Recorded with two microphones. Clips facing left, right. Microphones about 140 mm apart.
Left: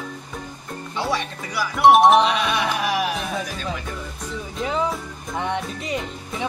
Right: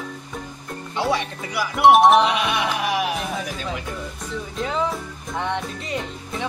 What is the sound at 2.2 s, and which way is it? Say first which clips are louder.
Music: even; 15° right (ahead or behind).